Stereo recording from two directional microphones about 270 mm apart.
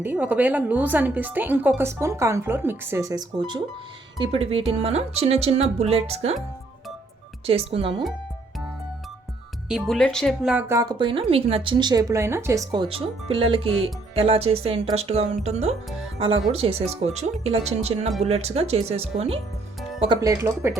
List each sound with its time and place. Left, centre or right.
0.0 s a woman's voice: centre; by 6.3 s right
7.4 s speech: right
9.6 s a woman's voice: centre